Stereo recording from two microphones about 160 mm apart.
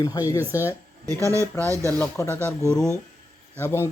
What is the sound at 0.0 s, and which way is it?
Speech, 20° left (ahead or behind).